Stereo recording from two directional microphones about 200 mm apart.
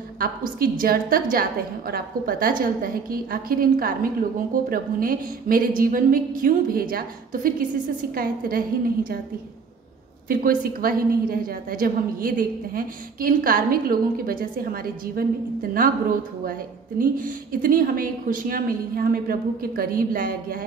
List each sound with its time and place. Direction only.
0.2 s a woman's voice: 45° right (ahead or behind)
10.2 s a woman's voice: 45° right (ahead or behind)